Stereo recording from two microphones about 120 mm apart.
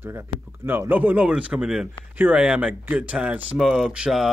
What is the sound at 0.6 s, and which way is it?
Speech, 15° right (ahead or behind).